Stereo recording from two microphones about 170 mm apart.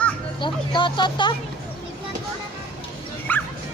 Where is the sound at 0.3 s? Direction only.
30° left (ahead or behind).